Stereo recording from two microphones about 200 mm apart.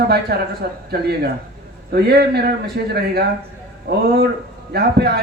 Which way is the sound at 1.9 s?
55° right (ahead or behind).